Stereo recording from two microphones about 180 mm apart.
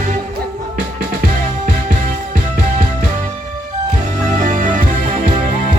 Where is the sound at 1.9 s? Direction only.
45° right (ahead or behind).